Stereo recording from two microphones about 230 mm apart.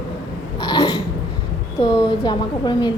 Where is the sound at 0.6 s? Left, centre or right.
Centre.